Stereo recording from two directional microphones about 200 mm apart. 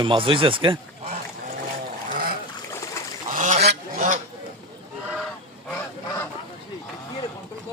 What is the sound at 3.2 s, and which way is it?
Goose, 40° right (ahead or behind).